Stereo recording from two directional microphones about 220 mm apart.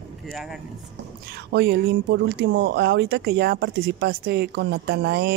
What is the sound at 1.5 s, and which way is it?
Speech, 45° right (ahead or behind).